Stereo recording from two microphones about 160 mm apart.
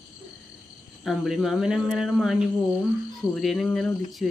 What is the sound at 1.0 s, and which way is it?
Speech, centre (ahead or behind).